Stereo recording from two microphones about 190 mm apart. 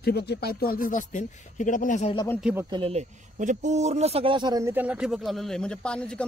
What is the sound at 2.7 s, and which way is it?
Speech, 30° right (ahead or behind).